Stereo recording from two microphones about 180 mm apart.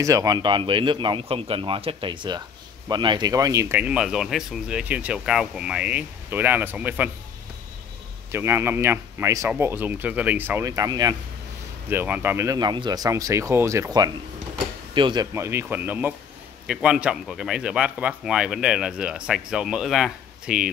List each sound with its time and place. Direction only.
0.0 s a man's voice: 20° right (ahead or behind)
8.3 s a man's voice: 15° right (ahead or behind)
15.3 s speech: 15° right (ahead or behind)